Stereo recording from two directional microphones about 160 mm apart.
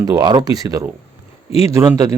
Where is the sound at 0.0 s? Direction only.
25° right (ahead or behind).